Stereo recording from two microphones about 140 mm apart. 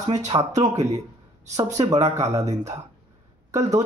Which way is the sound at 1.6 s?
50° right (ahead or behind).